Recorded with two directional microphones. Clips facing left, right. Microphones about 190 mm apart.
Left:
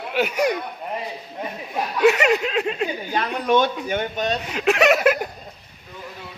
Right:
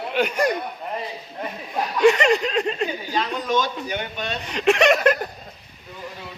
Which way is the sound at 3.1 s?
60° left (ahead or behind).